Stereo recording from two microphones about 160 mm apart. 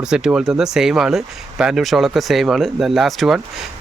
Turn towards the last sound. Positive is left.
turn(degrees=0)  # may be behind; listen again after turning